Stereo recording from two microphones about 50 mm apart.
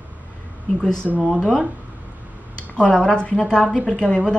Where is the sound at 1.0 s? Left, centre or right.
Centre.